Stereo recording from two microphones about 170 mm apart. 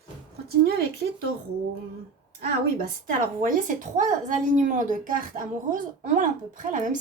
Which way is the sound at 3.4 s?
50° right (ahead or behind).